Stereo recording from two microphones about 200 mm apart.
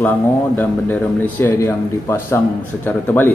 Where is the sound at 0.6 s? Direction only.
10° left (ahead or behind).